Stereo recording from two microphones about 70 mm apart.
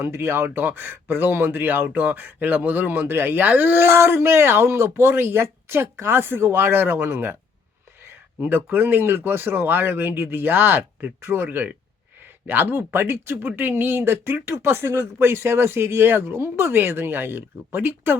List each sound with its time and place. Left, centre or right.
0.0 s speech: right